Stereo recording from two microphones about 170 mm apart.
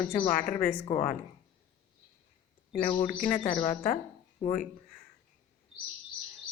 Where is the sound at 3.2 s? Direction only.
50° left (ahead or behind).